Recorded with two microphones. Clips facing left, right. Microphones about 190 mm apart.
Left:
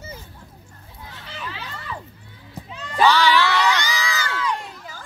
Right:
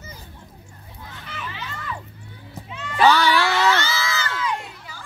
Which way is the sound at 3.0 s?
45° right (ahead or behind).